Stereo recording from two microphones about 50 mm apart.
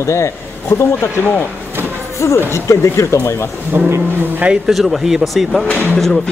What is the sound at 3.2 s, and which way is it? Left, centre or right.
Speech, left.